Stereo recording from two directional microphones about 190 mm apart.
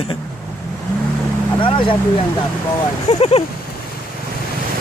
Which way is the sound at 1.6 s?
25° left (ahead or behind).